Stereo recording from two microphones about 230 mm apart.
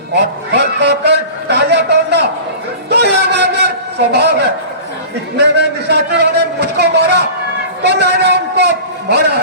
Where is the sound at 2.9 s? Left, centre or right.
Right.